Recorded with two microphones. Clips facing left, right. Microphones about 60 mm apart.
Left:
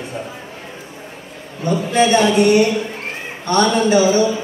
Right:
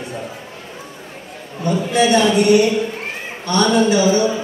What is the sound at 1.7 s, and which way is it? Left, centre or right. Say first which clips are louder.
Speech: left 1 dB; left.